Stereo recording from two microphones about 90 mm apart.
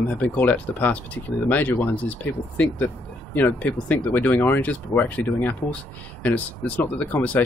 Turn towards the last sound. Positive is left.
turn(degrees=15)  # may be behind; listen again after turning